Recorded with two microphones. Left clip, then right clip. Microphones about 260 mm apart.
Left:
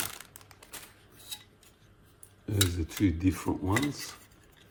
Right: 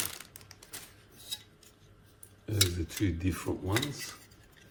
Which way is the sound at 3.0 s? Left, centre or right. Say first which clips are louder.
Left 6 dB; left.